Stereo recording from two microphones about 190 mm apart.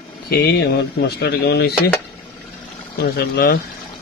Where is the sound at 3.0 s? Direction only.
55° left (ahead or behind).